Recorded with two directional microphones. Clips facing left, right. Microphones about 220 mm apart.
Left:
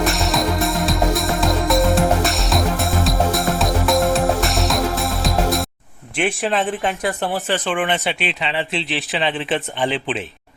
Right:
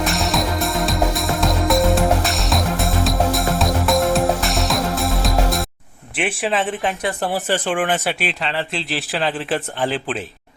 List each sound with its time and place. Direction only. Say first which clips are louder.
0.0 s music: left 1 dB; centre (ahead or behind)
6.1 s speech: left 1 dB; 5° right (ahead or behind)
7.3 s speech: right 1 dB; 10° right (ahead or behind)